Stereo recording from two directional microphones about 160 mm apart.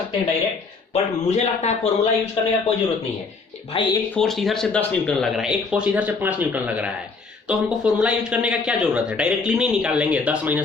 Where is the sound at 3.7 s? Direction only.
35° left (ahead or behind).